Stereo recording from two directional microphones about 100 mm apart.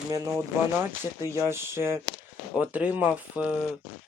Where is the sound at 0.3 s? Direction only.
25° right (ahead or behind).